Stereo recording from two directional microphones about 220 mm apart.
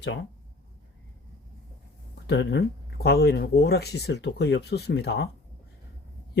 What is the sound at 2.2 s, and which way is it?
Speech, 50° left (ahead or behind).